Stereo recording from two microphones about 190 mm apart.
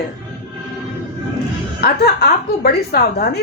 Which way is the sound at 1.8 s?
55° left (ahead or behind).